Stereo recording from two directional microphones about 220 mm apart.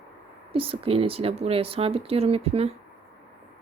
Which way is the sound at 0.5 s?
25° right (ahead or behind).